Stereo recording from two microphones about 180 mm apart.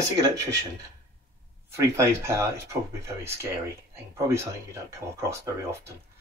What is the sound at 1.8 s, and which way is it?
Speech, 15° right (ahead or behind).